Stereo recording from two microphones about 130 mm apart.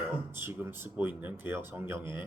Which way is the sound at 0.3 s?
15° right (ahead or behind).